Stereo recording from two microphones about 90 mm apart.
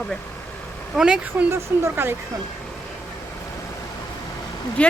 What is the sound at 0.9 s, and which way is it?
Speech, 10° right (ahead or behind).